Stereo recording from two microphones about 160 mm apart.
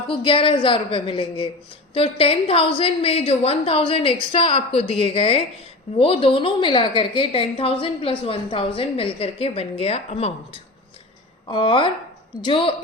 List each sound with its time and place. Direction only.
0.1 s a woman's voice: 30° left (ahead or behind)
11.4 s a woman's voice: 30° left (ahead or behind)